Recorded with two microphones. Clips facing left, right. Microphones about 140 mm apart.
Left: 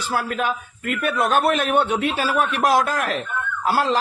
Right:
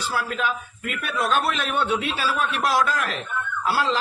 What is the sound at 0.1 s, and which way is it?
A man's voice, 45° left (ahead or behind).